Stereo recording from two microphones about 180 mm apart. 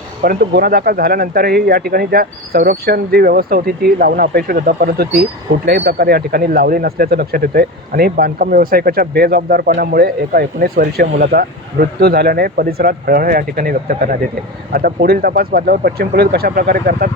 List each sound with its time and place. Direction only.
0.2 s speech: 55° right (ahead or behind)